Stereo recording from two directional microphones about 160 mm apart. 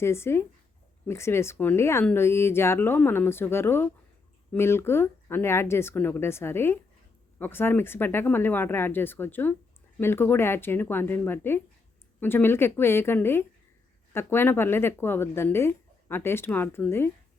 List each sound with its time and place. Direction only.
0.0 s speech: 15° left (ahead or behind)